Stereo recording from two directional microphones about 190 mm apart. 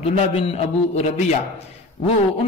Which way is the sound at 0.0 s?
30° left (ahead or behind).